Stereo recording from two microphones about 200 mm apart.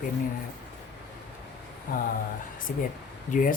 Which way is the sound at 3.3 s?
45° left (ahead or behind).